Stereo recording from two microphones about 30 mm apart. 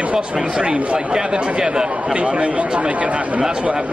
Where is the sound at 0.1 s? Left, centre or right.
Right.